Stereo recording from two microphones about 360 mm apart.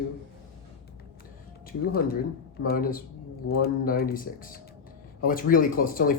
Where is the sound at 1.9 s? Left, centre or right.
Left.